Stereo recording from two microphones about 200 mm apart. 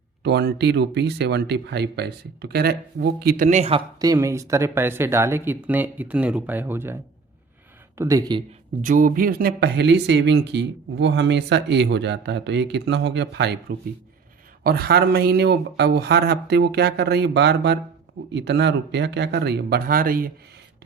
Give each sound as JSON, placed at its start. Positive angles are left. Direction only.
{"t": 0.2, "sound": "speech", "side_deg": -55}
{"t": 8.8, "sound": "speech", "side_deg": -40}